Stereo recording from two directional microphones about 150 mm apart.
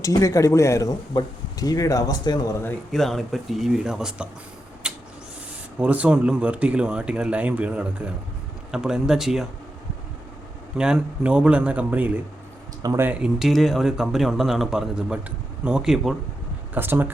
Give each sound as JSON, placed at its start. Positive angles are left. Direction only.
{"t": 0.0, "sound": "speech", "side_deg": 20}
{"t": 2.9, "sound": "speech", "side_deg": 0}
{"t": 4.8, "sound": "a sound", "side_deg": -5}
{"t": 5.8, "sound": "speech", "side_deg": -10}
{"t": 10.8, "sound": "speech", "side_deg": -5}
{"t": 12.8, "sound": "speech", "side_deg": -25}
{"t": 13.1, "sound": "speech", "side_deg": -5}